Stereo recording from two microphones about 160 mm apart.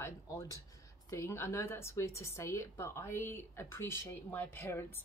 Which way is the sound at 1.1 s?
15° left (ahead or behind).